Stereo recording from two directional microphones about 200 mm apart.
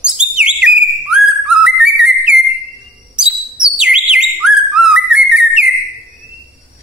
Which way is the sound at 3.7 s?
5° right (ahead or behind).